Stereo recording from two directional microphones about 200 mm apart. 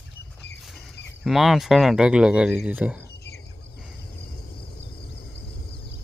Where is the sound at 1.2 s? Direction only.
Centre (ahead or behind).